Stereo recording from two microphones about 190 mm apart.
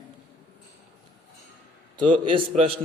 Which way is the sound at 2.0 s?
25° right (ahead or behind).